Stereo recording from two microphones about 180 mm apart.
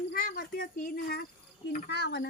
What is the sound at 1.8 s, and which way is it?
Speech, 70° left (ahead or behind).